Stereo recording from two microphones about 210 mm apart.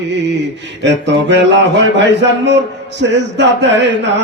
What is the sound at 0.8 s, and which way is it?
Mantra, 55° right (ahead or behind).